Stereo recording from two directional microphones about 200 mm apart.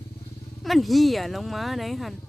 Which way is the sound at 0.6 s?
Centre (ahead or behind).